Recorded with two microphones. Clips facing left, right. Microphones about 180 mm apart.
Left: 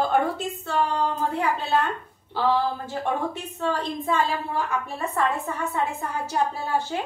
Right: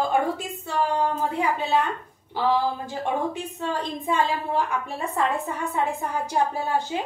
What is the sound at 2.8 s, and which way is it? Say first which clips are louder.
A woman's voice: even; 15° right (ahead or behind).